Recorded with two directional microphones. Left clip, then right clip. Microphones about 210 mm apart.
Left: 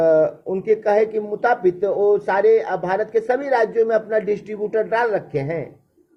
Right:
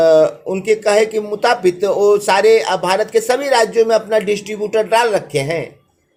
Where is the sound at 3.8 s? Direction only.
30° right (ahead or behind).